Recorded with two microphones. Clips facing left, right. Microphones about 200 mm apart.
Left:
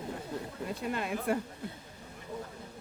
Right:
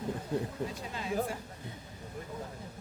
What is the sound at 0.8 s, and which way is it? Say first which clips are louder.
Speech: left 5 dB; 60° left (ahead or behind).